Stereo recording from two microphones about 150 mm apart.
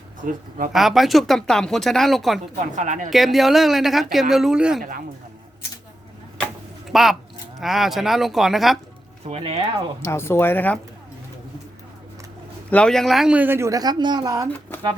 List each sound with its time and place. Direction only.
0.2 s speech: 65° right (ahead or behind)
0.7 s speech: centre (ahead or behind)
2.7 s speech: 55° right (ahead or behind)
3.1 s speech: centre (ahead or behind)
4.8 s a man's voice: 75° right (ahead or behind)
6.9 s speech: centre (ahead or behind)
9.2 s speech: 40° right (ahead or behind)
10.0 s speech: 15° left (ahead or behind)
12.7 s speech: 5° left (ahead or behind); by 14.4 s 25° right (ahead or behind)